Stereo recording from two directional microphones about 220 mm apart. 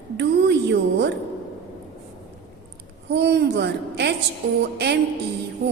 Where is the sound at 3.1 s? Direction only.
50° right (ahead or behind).